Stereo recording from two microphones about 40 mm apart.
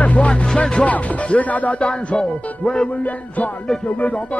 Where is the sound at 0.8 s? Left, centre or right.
Left.